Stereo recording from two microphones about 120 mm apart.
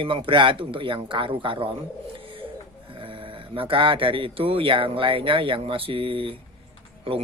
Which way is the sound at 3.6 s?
45° right (ahead or behind).